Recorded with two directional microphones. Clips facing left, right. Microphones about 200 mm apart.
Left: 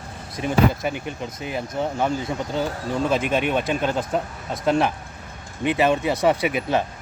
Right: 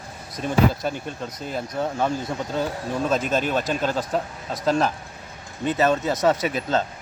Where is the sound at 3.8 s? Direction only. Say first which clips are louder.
Left 1 dB; 20° left (ahead or behind).